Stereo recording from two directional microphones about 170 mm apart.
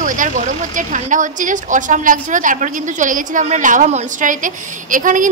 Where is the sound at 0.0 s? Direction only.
50° right (ahead or behind).